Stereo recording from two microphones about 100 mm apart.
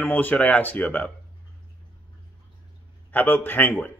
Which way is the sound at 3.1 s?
20° left (ahead or behind).